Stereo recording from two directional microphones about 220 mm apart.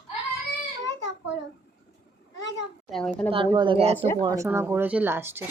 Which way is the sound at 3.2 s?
20° right (ahead or behind).